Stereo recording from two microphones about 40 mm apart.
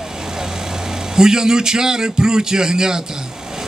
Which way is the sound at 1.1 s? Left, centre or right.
Centre.